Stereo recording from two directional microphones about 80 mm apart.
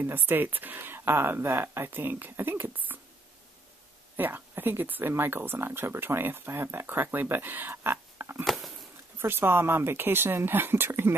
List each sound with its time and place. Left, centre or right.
0.0 s speech: right
4.2 s speech: right
8.5 s a sound: centre
9.2 s speech: right